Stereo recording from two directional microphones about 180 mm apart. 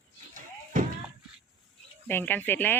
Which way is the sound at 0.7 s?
50° right (ahead or behind).